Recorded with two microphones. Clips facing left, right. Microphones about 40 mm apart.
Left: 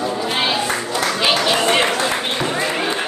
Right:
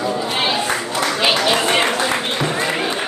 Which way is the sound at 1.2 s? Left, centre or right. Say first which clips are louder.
Right 1 dB; centre.